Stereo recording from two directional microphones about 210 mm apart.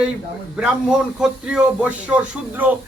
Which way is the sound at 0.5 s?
5° right (ahead or behind).